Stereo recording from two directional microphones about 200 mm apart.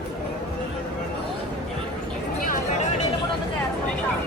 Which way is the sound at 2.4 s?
45° left (ahead or behind).